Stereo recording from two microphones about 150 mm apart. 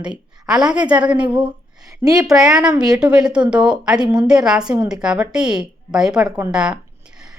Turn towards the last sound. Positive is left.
turn(degrees=-5)  # may be behind; listen again after turning